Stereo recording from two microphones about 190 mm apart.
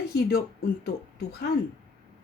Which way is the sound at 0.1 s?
55° left (ahead or behind).